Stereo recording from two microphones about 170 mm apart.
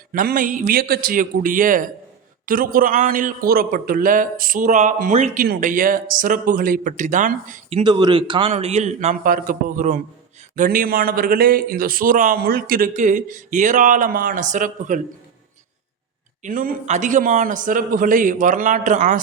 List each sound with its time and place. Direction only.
0.1 s a man's voice: 55° right (ahead or behind)
7.9 s speech: 25° right (ahead or behind)
8.5 s a man's voice: 45° right (ahead or behind)
16.4 s a man's voice: 55° right (ahead or behind)